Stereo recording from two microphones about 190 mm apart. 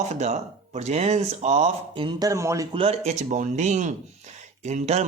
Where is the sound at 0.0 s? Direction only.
35° right (ahead or behind); by 2.6 s 15° right (ahead or behind).